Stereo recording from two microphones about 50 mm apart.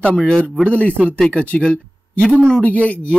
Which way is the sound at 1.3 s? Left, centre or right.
Left.